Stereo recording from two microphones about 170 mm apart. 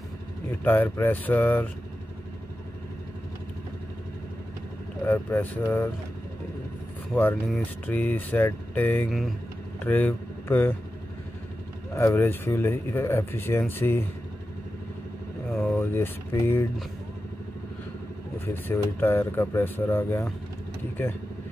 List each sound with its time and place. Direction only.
0.7 s speech: 10° left (ahead or behind)
5.0 s speech: 10° left (ahead or behind)
7.2 s speech: 10° left (ahead or behind)
11.9 s speech: 15° left (ahead or behind)
15.7 s speech: 15° left (ahead or behind)
18.4 s speech: 10° left (ahead or behind)